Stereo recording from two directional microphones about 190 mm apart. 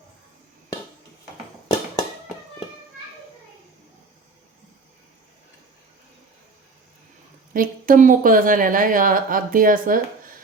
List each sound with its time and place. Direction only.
7.5 s a woman's voice: 45° right (ahead or behind)